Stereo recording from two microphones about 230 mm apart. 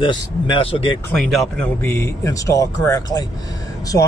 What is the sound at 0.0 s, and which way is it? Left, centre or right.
Speech, left.